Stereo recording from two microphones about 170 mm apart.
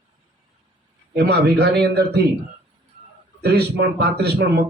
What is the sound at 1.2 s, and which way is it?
Speech, 70° right (ahead or behind).